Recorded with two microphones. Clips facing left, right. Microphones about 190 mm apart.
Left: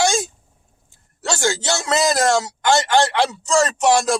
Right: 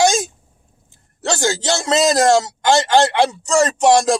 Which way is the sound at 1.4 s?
20° right (ahead or behind).